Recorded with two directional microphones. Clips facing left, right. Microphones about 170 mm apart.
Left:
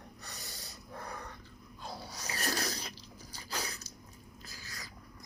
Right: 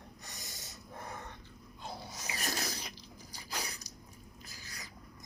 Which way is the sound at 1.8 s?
20° right (ahead or behind).